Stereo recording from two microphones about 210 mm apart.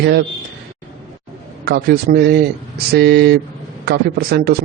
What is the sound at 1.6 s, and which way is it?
A man's voice, 45° right (ahead or behind).